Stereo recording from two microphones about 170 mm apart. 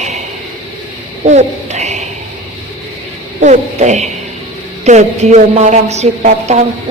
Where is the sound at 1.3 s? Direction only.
40° right (ahead or behind).